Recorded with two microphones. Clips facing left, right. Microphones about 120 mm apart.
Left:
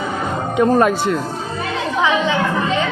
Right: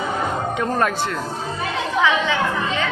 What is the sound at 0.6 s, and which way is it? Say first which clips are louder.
Speech: left 9 dB; 10° left (ahead or behind).